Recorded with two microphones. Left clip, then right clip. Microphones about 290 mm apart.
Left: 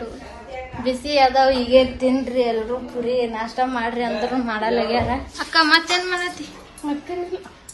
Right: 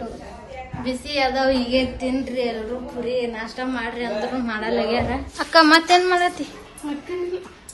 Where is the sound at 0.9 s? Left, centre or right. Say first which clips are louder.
Left 5 dB; centre.